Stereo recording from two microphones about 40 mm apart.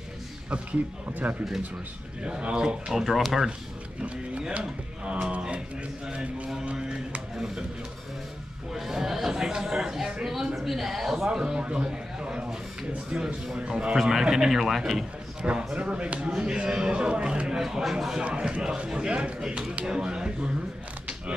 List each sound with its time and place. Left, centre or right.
1.2 s speech: right
2.5 s a man's voice: right
2.9 s a man's voice: centre
4.0 s a man's voice: right
8.7 s a man's voice: centre
11.2 s a man's voice: centre
13.6 s a man's voice: right
13.9 s speech: centre
15.4 s a man's voice: right
17.6 s speech: centre
18.2 s a man's voice: right